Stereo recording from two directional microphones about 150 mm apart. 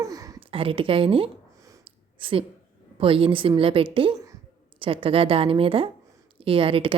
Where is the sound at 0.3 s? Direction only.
35° right (ahead or behind).